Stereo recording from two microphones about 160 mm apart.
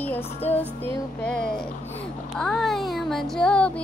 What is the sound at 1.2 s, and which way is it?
Child singing, 5° left (ahead or behind).